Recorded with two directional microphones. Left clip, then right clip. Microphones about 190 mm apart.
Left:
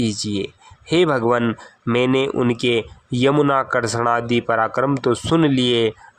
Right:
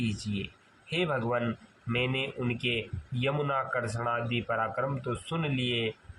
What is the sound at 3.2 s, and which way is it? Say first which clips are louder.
Speech: left 13 dB; 60° left (ahead or behind).